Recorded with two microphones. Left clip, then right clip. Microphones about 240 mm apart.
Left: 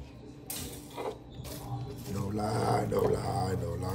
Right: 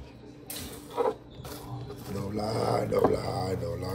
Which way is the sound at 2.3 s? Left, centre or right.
Left.